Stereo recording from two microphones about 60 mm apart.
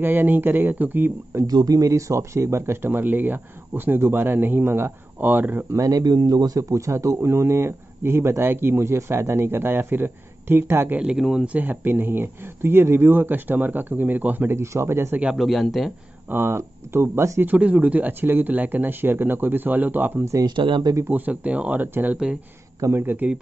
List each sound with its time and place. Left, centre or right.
0.0 s speech: right
1.5 s speech: right
5.8 s a man's voice: right
6.7 s speech: right
11.1 s speech: centre
11.4 s speech: right
14.5 s speech: right
15.3 s a man's voice: centre
16.3 s speech: right
17.6 s speech: right